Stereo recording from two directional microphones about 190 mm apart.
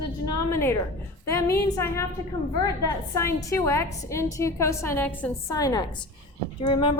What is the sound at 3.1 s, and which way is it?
A woman's voice, 15° left (ahead or behind).